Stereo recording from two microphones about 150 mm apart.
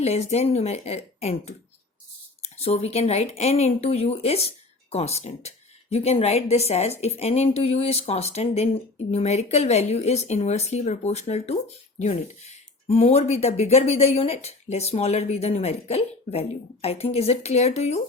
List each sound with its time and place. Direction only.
0.0 s speech: 45° left (ahead or behind)